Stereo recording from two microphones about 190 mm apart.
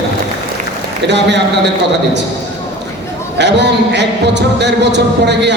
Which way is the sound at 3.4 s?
65° right (ahead or behind).